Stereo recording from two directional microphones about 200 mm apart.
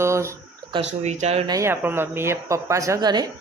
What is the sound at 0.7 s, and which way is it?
Speech, 30° right (ahead or behind).